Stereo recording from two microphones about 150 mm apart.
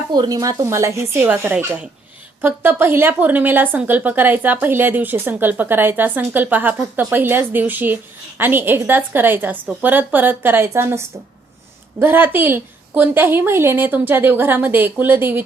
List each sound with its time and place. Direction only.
0.1 s a woman's voice: 25° right (ahead or behind)